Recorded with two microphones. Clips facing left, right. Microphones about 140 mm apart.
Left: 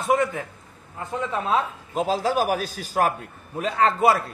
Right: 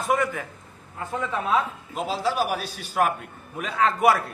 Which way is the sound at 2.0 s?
45° left (ahead or behind).